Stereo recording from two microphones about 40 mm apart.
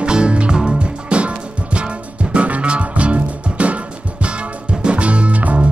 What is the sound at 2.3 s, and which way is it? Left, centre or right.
Music, right.